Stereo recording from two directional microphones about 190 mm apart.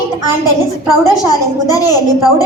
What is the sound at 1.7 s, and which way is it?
Speech, 20° left (ahead or behind).